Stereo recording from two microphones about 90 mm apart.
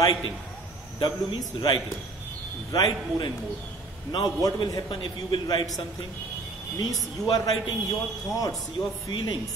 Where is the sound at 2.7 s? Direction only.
50° left (ahead or behind).